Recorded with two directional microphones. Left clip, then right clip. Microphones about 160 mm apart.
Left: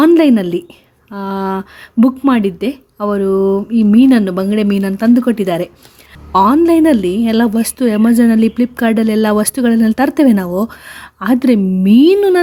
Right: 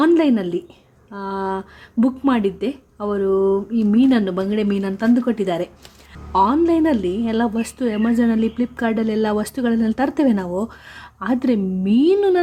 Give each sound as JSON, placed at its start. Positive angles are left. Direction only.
{"t": 0.0, "sound": "a woman's voice", "side_deg": 40}